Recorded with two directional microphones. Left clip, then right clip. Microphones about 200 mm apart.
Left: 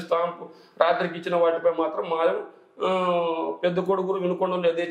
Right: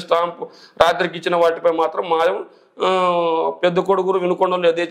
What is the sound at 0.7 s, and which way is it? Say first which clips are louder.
Speech: right 6 dB; 50° right (ahead or behind).